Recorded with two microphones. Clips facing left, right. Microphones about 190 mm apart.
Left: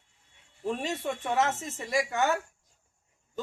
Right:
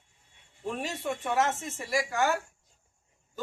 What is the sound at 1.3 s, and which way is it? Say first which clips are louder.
Speech: even; centre (ahead or behind).